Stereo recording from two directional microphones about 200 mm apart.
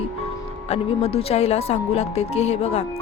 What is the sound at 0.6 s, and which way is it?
Speech, 30° left (ahead or behind).